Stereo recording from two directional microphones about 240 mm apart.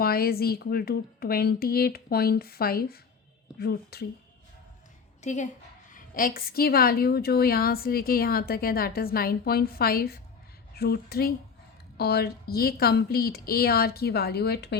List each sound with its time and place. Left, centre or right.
0.0 s a woman's voice: left
5.2 s a woman's voice: left